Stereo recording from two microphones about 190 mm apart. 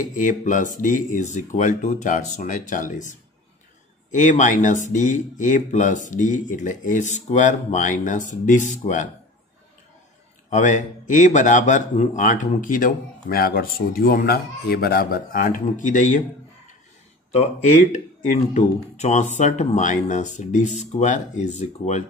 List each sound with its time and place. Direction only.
0.0 s speech: 40° left (ahead or behind)
10.5 s speech: 40° left (ahead or behind)
17.3 s speech: 35° left (ahead or behind)